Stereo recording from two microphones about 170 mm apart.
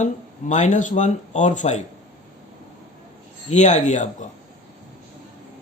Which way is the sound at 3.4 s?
45° left (ahead or behind).